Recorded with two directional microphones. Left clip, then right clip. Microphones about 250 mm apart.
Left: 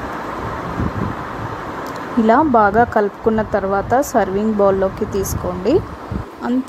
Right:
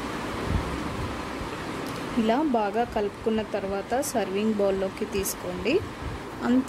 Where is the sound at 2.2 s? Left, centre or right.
Centre.